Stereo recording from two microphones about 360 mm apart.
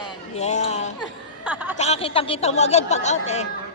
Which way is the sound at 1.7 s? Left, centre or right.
Centre.